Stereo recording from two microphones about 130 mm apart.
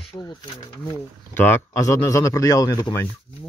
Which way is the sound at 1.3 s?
15° left (ahead or behind).